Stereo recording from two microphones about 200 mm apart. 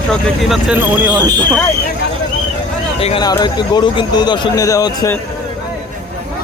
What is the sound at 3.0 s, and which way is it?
Speech, 25° left (ahead or behind).